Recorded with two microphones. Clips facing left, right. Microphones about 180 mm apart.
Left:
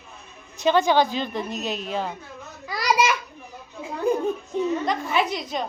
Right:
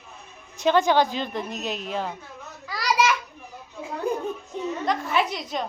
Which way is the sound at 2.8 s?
50° left (ahead or behind).